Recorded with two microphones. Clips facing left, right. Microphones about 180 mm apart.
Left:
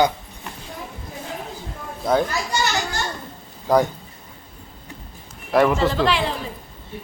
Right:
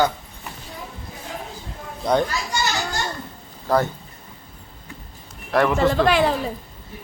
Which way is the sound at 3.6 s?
15° left (ahead or behind).